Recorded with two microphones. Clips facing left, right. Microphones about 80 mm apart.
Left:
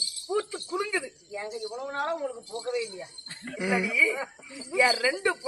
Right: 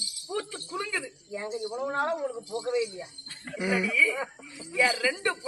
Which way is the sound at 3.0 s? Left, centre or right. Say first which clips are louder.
Even; centre.